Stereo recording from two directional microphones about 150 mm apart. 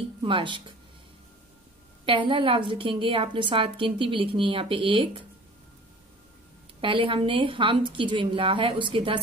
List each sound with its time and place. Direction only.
0.2 s speech: 35° right (ahead or behind)
2.0 s a woman's voice: 35° right (ahead or behind)
6.8 s a woman's voice: 35° right (ahead or behind)